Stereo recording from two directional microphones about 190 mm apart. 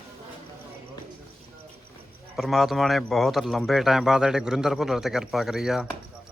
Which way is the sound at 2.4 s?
Centre (ahead or behind).